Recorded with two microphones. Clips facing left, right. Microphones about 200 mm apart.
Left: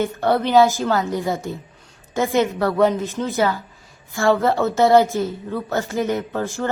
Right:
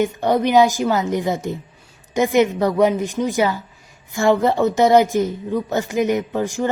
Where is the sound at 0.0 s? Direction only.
15° right (ahead or behind).